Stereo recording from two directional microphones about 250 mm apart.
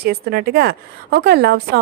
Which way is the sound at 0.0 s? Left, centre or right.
Right.